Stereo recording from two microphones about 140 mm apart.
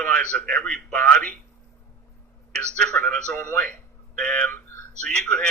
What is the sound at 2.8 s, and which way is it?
A man's voice, 5° left (ahead or behind).